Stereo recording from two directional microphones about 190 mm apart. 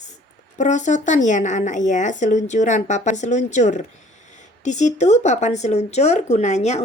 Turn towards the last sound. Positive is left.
turn(degrees=35)  # may be behind; listen again after turning